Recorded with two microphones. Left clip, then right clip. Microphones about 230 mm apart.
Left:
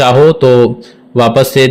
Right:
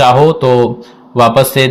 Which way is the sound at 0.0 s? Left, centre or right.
Left.